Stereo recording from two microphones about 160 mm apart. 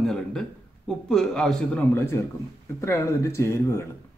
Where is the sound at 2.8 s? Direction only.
15° left (ahead or behind).